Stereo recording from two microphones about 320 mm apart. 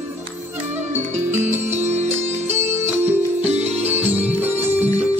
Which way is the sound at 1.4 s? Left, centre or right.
Right.